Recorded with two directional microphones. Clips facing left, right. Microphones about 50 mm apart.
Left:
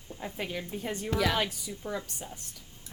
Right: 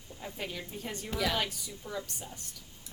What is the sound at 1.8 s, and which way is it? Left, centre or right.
Speech, left.